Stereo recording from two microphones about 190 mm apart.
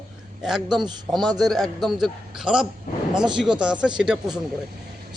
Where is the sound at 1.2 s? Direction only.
20° right (ahead or behind).